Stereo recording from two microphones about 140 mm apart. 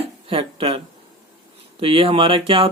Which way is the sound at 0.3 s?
40° right (ahead or behind).